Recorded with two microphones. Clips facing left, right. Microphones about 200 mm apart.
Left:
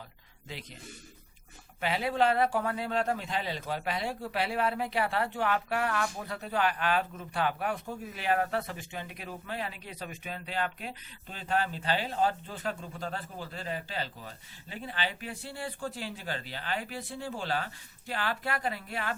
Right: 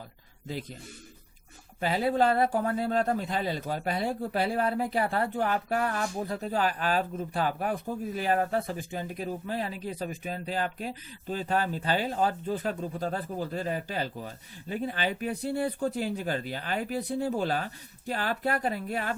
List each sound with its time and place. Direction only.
1.8 s speech: 35° right (ahead or behind)